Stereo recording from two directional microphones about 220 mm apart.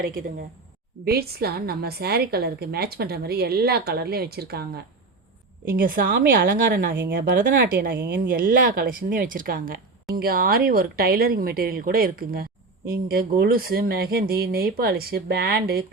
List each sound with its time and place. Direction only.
0.0 s speech: 40° right (ahead or behind)
5.7 s speech: 40° right (ahead or behind)